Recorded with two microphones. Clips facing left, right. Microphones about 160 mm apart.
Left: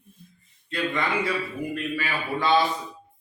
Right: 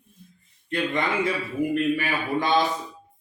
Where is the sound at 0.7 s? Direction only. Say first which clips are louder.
Right 2 dB; 20° right (ahead or behind).